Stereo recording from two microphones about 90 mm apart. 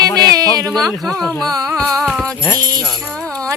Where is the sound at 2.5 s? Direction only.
45° right (ahead or behind).